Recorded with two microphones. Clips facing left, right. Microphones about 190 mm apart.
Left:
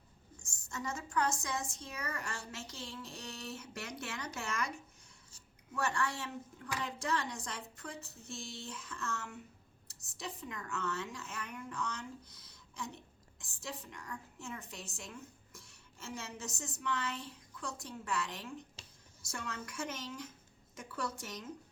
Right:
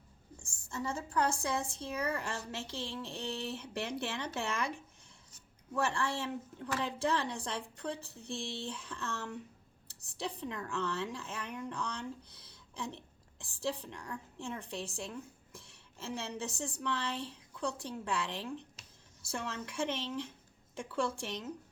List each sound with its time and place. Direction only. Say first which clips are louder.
0.4 s a woman's voice: right 3 dB; 30° right (ahead or behind)
5.7 s a woman's voice: right 2 dB; 30° right (ahead or behind)